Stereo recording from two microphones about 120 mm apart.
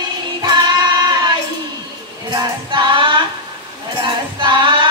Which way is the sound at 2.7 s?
45° right (ahead or behind).